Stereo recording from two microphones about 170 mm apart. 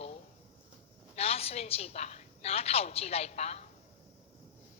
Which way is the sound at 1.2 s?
35° left (ahead or behind).